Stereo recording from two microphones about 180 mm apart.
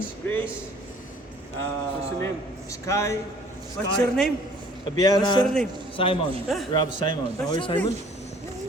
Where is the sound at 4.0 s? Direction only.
5° left (ahead or behind).